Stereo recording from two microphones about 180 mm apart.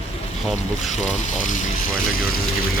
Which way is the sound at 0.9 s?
40° left (ahead or behind).